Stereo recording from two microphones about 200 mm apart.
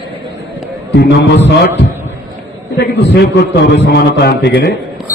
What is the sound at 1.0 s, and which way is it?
Speech, 55° left (ahead or behind).